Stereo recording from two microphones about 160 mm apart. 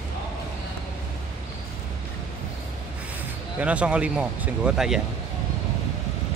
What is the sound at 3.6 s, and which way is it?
Speech, 5° right (ahead or behind).